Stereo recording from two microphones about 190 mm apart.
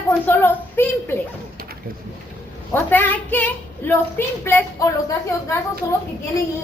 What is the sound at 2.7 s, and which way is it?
A woman's voice, 10° left (ahead or behind).